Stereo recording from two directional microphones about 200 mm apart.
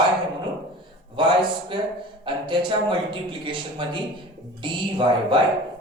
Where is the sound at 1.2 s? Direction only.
25° right (ahead or behind).